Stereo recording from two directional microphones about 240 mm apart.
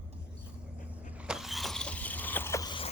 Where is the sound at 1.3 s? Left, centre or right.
Centre.